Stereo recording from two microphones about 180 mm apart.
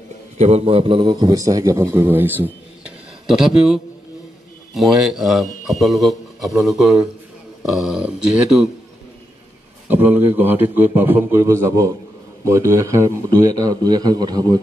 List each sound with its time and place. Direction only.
0.4 s a man's voice: 35° right (ahead or behind); by 8.6 s 5° right (ahead or behind)
9.8 s a man's voice: 10° right (ahead or behind)